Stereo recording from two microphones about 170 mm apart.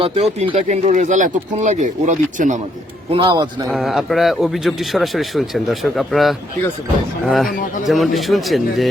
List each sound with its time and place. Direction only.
0.0 s speech: 35° right (ahead or behind)
3.1 s a man's voice: 30° right (ahead or behind)
3.7 s a man's voice: centre (ahead or behind)